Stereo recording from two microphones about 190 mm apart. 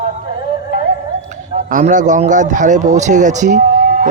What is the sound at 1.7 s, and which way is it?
Speech, 45° right (ahead or behind).